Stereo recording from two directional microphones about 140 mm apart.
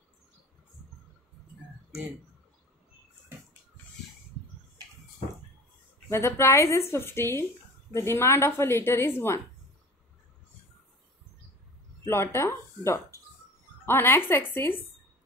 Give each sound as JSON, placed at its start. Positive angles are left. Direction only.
{"t": 6.0, "sound": "a woman's voice", "side_deg": 20}
{"t": 12.1, "sound": "a woman's voice", "side_deg": 20}